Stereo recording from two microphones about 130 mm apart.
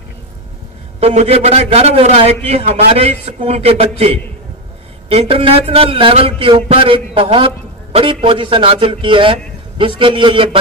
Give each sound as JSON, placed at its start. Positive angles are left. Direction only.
{"t": 0.9, "sound": "a man's voice", "side_deg": -55}